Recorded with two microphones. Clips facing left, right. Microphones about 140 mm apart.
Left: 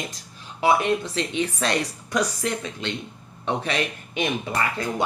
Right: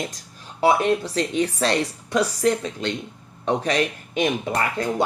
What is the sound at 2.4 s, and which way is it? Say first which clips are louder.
Speech: right 6 dB; 40° right (ahead or behind).